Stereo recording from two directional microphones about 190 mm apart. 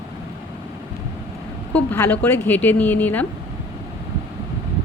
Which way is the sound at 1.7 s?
10° left (ahead or behind).